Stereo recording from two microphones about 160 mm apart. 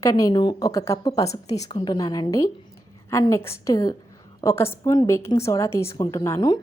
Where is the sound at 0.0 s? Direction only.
25° left (ahead or behind).